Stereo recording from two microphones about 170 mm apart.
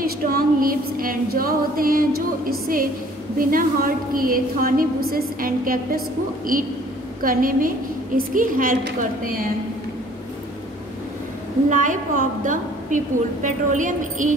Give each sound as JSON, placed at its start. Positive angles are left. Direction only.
{"t": 0.0, "sound": "a woman's voice", "side_deg": -60}
{"t": 3.3, "sound": "a woman's voice", "side_deg": -55}
{"t": 11.7, "sound": "a woman's voice", "side_deg": -50}